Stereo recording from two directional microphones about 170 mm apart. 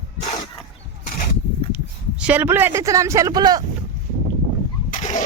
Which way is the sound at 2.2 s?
10° right (ahead or behind).